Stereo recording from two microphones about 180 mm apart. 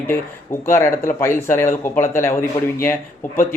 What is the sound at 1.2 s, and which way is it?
A man's voice, 15° left (ahead or behind).